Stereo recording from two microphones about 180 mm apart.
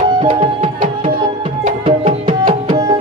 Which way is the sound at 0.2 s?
30° right (ahead or behind).